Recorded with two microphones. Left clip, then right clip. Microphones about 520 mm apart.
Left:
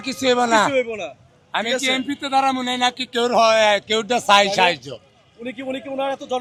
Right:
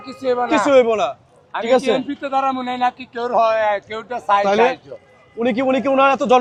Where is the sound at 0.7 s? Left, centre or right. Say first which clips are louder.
Right 9 dB; right.